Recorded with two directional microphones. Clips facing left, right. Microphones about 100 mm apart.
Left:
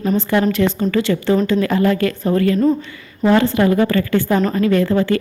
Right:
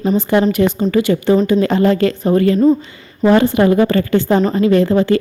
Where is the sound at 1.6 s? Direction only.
25° right (ahead or behind).